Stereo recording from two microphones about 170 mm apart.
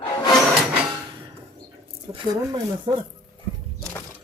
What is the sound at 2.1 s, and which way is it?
Speech, 25° right (ahead or behind).